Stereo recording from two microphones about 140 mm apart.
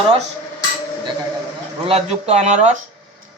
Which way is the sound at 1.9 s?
50° right (ahead or behind).